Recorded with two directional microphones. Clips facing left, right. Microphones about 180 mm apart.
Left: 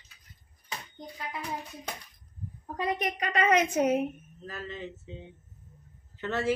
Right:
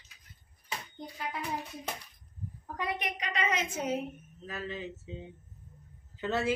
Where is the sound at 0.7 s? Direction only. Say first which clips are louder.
Even; 5° right (ahead or behind).